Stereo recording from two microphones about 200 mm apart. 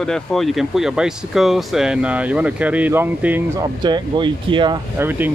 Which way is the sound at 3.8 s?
25° right (ahead or behind).